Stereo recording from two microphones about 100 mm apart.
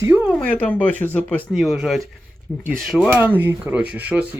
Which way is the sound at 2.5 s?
20° left (ahead or behind).